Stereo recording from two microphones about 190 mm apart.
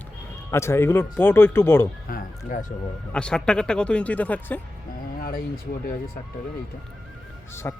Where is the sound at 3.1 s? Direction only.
5° left (ahead or behind).